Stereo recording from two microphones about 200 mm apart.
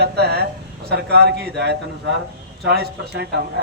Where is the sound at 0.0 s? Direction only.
55° right (ahead or behind).